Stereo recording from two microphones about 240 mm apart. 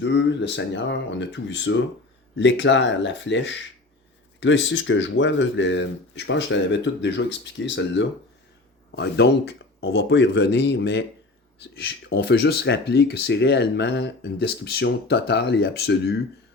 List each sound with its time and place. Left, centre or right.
0.0 s speech: left